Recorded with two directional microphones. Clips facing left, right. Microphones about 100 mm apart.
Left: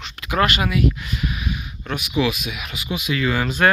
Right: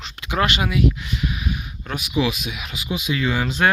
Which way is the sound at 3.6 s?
10° right (ahead or behind).